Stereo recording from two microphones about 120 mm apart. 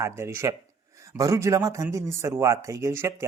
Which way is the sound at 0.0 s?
20° right (ahead or behind).